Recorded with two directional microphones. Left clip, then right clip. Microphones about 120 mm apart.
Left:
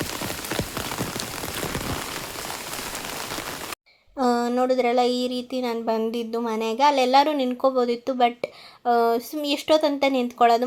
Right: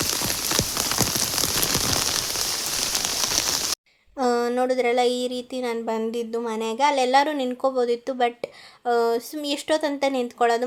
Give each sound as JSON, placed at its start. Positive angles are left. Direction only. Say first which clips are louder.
{"t": 4.2, "sound": "speech", "louder": "even", "side_deg": 20}